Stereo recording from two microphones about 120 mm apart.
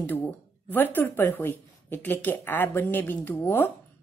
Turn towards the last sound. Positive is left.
turn(degrees=15)  # may be behind; listen again after turning